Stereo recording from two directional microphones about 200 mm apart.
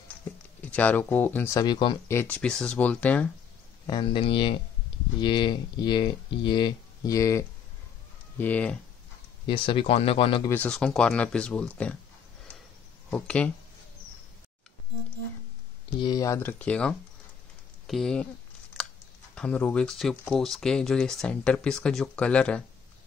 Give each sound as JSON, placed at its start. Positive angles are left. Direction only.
{"t": 0.6, "sound": "speech", "side_deg": 5}
{"t": 2.1, "sound": "speech", "side_deg": 10}
{"t": 3.8, "sound": "speech", "side_deg": 25}
{"t": 9.5, "sound": "speech", "side_deg": 25}
{"t": 10.5, "sound": "speech", "side_deg": 5}
{"t": 13.1, "sound": "speech", "side_deg": 5}
{"t": 16.0, "sound": "speech", "side_deg": 20}
{"t": 17.8, "sound": "a sound", "side_deg": 0}
{"t": 19.3, "sound": "speech", "side_deg": 5}